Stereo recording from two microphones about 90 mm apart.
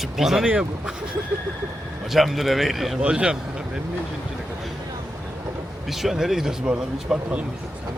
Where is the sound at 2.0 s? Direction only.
Centre (ahead or behind).